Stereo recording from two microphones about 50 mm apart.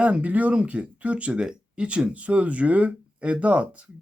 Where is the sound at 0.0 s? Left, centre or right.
Right.